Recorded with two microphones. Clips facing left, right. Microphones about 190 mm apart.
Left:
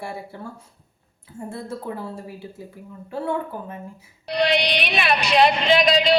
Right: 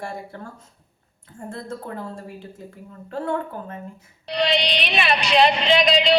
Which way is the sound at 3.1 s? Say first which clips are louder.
Even; 10° left (ahead or behind).